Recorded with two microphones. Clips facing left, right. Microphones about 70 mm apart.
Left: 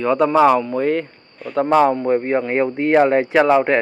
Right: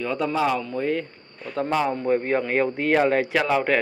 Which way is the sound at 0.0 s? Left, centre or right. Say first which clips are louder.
Left 9 dB; left.